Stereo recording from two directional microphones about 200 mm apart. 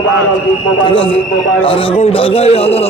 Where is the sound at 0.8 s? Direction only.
25° left (ahead or behind).